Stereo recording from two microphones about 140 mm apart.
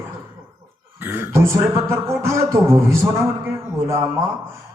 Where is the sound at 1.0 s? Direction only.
15° right (ahead or behind).